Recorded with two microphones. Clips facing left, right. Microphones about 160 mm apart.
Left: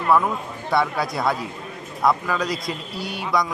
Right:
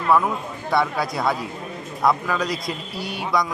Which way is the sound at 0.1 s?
Centre (ahead or behind).